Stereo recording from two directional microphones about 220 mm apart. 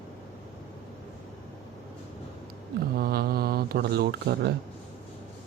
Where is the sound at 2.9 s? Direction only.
45° right (ahead or behind).